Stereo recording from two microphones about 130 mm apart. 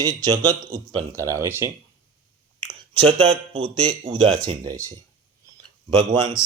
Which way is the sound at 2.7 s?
45° right (ahead or behind).